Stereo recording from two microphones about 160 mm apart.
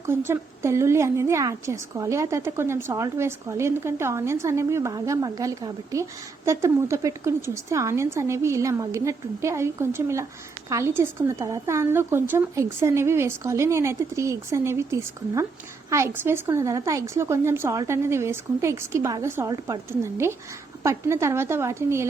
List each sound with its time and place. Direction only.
0.3 s a woman's voice: 15° right (ahead or behind)